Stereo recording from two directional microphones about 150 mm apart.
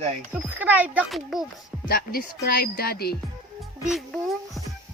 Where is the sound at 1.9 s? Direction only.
85° left.